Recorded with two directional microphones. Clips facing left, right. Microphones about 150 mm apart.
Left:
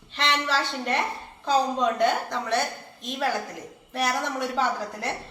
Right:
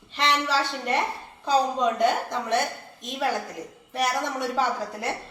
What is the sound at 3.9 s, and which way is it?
A woman's voice, 5° right (ahead or behind).